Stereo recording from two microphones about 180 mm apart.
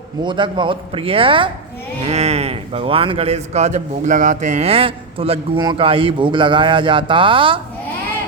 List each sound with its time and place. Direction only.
0.2 s a man's voice: 25° right (ahead or behind)